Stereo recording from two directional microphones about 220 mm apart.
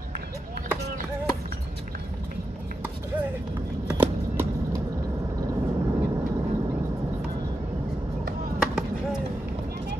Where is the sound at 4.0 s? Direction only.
10° right (ahead or behind).